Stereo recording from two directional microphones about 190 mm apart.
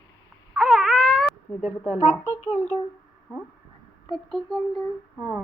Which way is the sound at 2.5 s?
35° left (ahead or behind).